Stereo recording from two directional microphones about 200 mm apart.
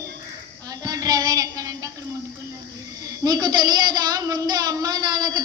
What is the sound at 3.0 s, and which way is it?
A woman's voice, 20° right (ahead or behind).